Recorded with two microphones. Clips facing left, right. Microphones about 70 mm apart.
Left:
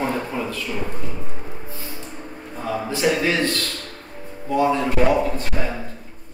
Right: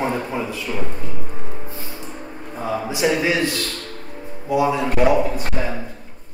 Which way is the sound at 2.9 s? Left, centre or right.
Centre.